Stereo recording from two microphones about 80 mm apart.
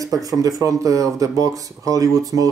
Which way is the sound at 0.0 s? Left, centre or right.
Right.